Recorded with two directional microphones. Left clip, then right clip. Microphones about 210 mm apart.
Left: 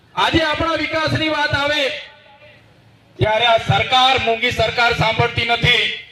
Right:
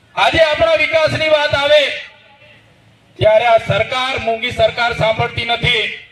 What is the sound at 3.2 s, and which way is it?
Speech, 45° right (ahead or behind).